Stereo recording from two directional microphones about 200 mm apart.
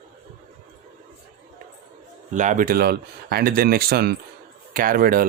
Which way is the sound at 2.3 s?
40° right (ahead or behind).